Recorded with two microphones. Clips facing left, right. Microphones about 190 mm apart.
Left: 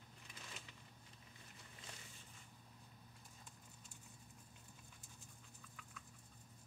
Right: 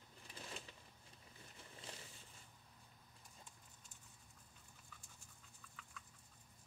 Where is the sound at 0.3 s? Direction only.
35° right (ahead or behind).